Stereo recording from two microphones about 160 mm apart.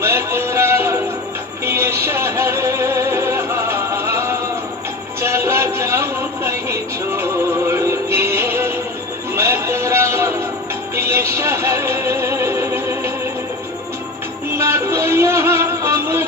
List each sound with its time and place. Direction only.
0.0 s music: 15° right (ahead or behind)
14.5 s music: 15° right (ahead or behind)